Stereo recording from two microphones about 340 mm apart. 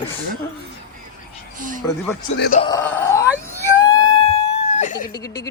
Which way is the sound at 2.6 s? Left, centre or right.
Centre.